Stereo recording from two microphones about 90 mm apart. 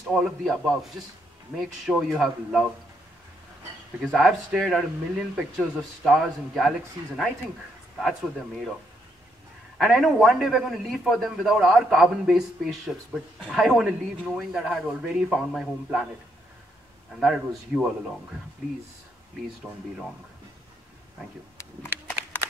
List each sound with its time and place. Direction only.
0.0 s a man's voice: centre (ahead or behind)
4.0 s a man's voice: centre (ahead or behind)
8.1 s a man's voice: centre (ahead or behind)
9.8 s a man's voice: centre (ahead or behind)
17.1 s a man's voice: 5° right (ahead or behind)
19.7 s speech: 35° right (ahead or behind)